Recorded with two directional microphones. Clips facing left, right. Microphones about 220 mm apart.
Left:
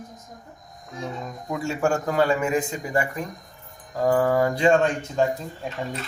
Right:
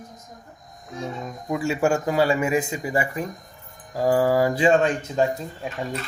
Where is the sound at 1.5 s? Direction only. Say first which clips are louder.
Right 2 dB; 5° right (ahead or behind).